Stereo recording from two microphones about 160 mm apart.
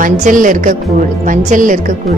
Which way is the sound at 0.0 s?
55° right (ahead or behind).